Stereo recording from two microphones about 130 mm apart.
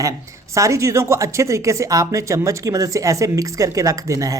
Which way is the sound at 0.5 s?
25° right (ahead or behind).